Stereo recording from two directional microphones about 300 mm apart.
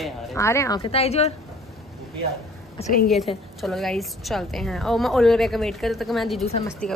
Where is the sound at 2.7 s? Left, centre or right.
Left.